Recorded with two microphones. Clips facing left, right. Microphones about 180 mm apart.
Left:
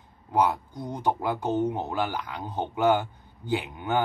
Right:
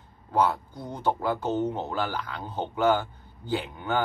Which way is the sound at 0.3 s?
15° left (ahead or behind).